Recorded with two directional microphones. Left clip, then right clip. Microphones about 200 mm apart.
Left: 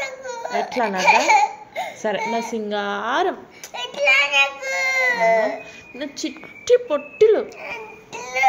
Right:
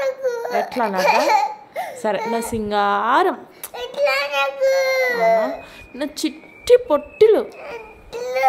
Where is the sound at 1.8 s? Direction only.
25° right (ahead or behind).